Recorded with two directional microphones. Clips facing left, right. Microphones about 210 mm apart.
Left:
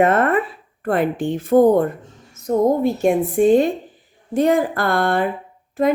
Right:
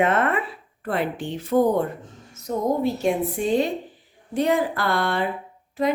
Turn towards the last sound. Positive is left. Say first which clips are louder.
# left 5 dB
turn(degrees=50)  # may be behind; listen again after turning